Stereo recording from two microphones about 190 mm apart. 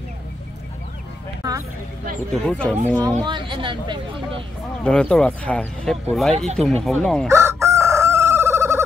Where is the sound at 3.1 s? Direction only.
25° right (ahead or behind).